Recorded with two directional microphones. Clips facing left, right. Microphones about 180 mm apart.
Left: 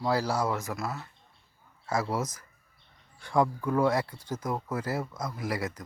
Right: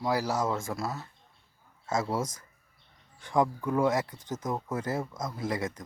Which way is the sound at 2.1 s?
25° right (ahead or behind).